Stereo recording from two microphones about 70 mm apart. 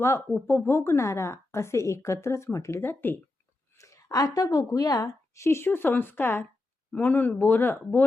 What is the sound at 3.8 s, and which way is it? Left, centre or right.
A woman's voice, left.